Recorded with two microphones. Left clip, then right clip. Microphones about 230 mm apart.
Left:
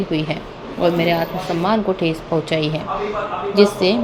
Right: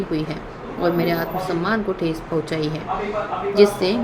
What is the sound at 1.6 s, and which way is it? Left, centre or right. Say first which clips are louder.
A woman's voice: left 4 dB; centre.